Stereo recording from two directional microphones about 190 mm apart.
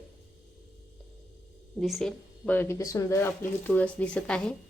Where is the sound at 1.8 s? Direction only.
Centre (ahead or behind).